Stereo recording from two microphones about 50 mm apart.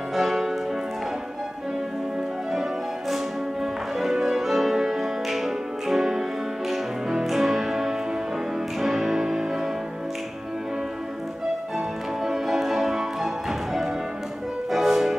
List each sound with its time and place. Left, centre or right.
0.1 s music: centre
4.0 s music: centre
12.2 s music: centre